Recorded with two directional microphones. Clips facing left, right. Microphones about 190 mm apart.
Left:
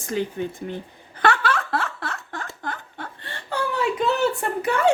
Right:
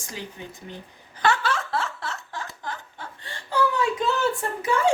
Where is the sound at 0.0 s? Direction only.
55° left (ahead or behind).